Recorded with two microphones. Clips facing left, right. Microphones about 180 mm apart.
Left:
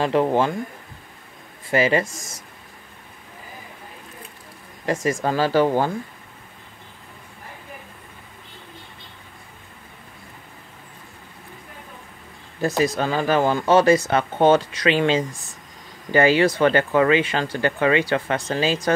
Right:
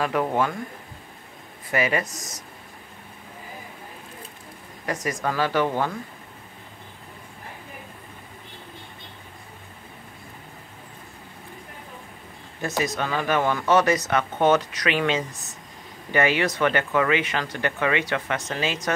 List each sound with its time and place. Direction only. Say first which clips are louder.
0.0 s speech: left 4 dB; 30° left (ahead or behind)
1.7 s speech: left 5 dB; 30° left (ahead or behind)
4.8 s speech: left 5 dB; 25° left (ahead or behind)
12.6 s speech: left 5 dB; 30° left (ahead or behind)